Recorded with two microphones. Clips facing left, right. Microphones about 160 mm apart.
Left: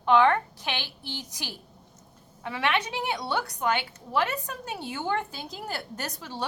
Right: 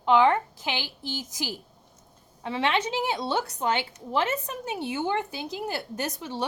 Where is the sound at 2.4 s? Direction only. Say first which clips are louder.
Right 2 dB; 25° right (ahead or behind).